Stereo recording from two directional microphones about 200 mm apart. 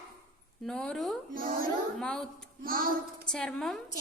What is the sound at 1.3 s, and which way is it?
Child singing, 45° right (ahead or behind).